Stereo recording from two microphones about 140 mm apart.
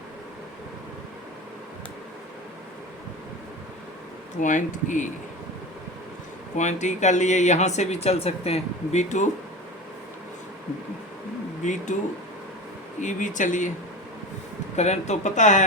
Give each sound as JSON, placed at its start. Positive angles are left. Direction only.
{"t": 4.4, "sound": "speech", "side_deg": 65}
{"t": 6.6, "sound": "speech", "side_deg": 55}
{"t": 11.6, "sound": "speech", "side_deg": 60}
{"t": 13.0, "sound": "speech", "side_deg": 65}
{"t": 14.8, "sound": "speech", "side_deg": 55}